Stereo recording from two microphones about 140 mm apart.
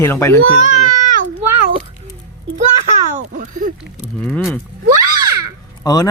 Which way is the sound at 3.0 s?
70° right (ahead or behind).